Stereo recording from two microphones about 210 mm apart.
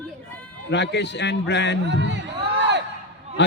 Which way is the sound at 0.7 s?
55° left (ahead or behind).